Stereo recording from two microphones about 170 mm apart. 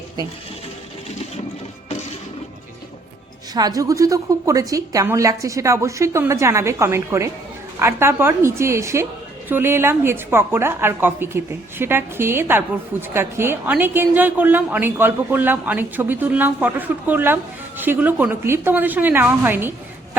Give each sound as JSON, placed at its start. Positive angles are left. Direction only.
{"t": 3.5, "sound": "a woman's voice", "side_deg": -20}